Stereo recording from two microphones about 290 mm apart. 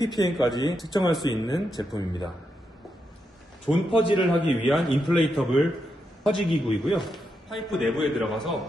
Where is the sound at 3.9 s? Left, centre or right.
Centre.